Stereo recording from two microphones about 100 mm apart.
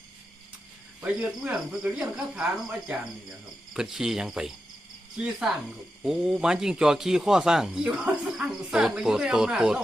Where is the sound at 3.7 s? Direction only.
5° right (ahead or behind).